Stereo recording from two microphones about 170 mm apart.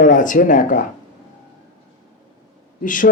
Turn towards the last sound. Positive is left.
turn(degrees=50)  # may be behind; listen again after turning